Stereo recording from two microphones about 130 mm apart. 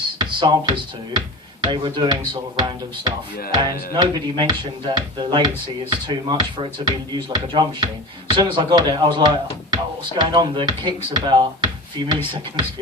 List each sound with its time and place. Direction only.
0.3 s speech: 35° right (ahead or behind)